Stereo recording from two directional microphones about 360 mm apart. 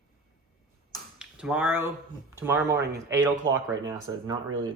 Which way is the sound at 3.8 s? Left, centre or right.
Centre.